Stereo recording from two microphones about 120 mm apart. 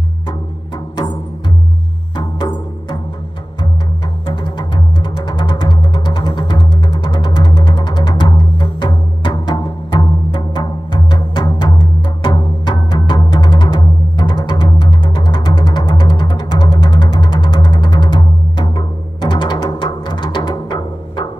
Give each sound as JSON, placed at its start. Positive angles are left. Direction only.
{"t": 2.1, "sound": "music", "side_deg": 40}
{"t": 4.3, "sound": "music", "side_deg": 45}
{"t": 9.8, "sound": "music", "side_deg": 40}
{"t": 19.2, "sound": "music", "side_deg": 40}